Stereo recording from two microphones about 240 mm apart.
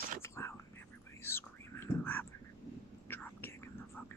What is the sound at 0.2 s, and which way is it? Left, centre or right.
Whispering, centre.